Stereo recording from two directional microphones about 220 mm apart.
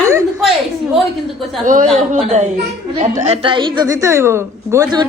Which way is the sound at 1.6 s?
35° right (ahead or behind).